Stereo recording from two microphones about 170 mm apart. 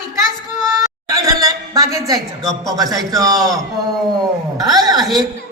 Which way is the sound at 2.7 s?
20° right (ahead or behind).